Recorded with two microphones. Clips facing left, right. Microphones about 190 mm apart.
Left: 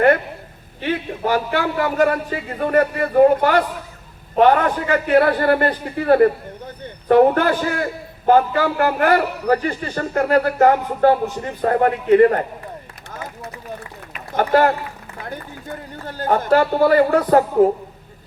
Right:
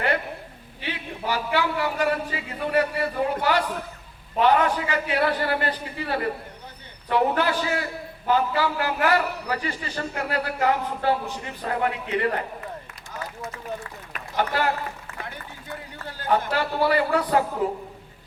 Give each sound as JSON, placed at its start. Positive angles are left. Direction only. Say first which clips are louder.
{"t": 0.8, "sound": "a man's voice", "louder": "left 10 dB", "side_deg": 50}
{"t": 14.3, "sound": "a man's voice", "louder": "left 8 dB", "side_deg": 50}